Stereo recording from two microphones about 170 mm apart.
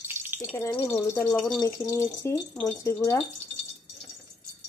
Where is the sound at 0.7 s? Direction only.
15° left (ahead or behind).